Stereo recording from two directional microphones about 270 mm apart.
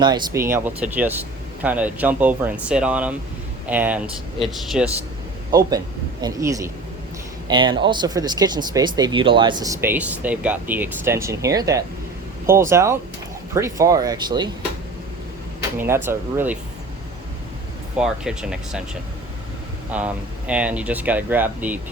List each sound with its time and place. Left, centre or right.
0.0 s speech: centre
6.2 s speech: centre
15.8 s speech: centre
18.0 s speech: centre
19.9 s speech: centre